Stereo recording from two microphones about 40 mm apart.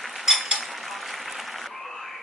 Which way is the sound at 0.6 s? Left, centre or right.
Centre.